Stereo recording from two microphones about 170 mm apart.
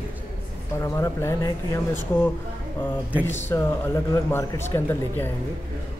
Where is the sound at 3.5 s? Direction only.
15° left (ahead or behind).